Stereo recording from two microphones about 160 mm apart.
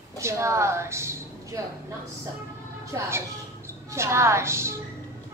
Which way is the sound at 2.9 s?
20° right (ahead or behind).